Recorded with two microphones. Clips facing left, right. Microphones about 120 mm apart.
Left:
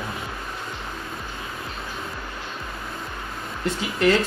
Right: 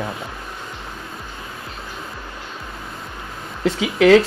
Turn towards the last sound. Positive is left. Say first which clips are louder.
# right 8 dB
turn(degrees=-90)